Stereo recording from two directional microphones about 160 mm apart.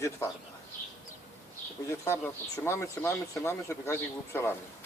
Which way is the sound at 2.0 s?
15° left (ahead or behind).